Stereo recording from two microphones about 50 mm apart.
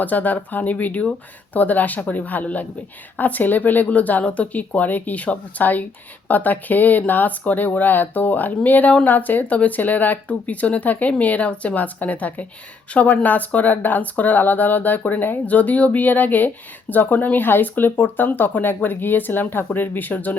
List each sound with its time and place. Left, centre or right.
0.0 s speech: left